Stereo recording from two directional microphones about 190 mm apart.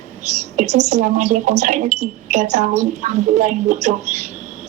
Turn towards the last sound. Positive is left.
turn(degrees=-40)  # may be behind; listen again after turning